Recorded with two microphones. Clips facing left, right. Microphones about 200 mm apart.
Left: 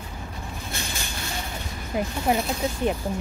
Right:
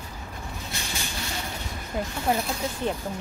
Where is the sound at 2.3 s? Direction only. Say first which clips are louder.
Left 2 dB; 15° left (ahead or behind).